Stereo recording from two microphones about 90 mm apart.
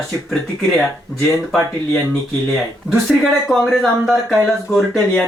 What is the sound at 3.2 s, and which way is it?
Speech, 10° left (ahead or behind).